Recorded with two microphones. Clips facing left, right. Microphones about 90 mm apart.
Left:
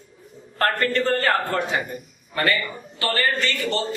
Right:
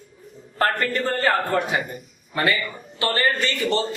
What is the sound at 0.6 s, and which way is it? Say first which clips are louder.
A man's voice: left 1 dB; 15° right (ahead or behind).